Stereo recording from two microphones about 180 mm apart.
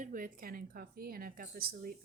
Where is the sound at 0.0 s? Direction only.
50° right (ahead or behind).